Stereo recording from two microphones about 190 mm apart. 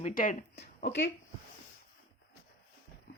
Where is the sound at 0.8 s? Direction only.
65° left (ahead or behind).